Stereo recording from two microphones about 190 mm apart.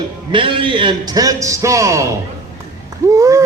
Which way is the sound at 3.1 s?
15° right (ahead or behind).